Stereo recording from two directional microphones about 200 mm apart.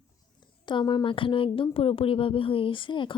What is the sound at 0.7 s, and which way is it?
Speech, 20° left (ahead or behind).